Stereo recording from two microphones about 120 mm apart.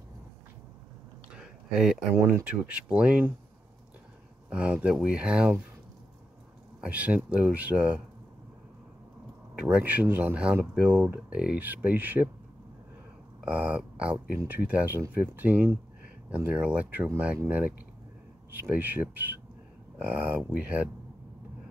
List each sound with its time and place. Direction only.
1.3 s a sound: 5° right (ahead or behind)
2.1 s speech: 20° right (ahead or behind)
4.5 s speech: 10° right (ahead or behind)
6.8 s speech: 10° right (ahead or behind)
9.8 s speech: 15° right (ahead or behind)
13.5 s speech: 10° right (ahead or behind)